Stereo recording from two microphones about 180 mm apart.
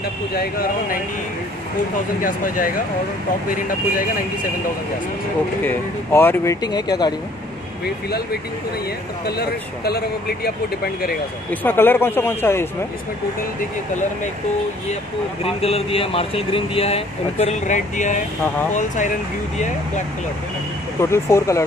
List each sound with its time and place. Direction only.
2.2 s speech: 50° left (ahead or behind)
5.6 s speech: 10° left (ahead or behind)
7.8 s speech: 65° left (ahead or behind)
11.6 s speech: 10° left (ahead or behind)
15.4 s speech: 30° left (ahead or behind)
21.0 s speech: 15° left (ahead or behind)